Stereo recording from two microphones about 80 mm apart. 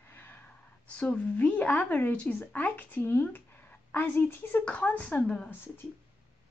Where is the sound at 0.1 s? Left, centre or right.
Left.